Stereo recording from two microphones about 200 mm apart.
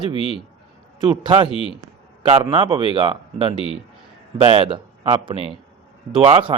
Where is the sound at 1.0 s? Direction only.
25° right (ahead or behind).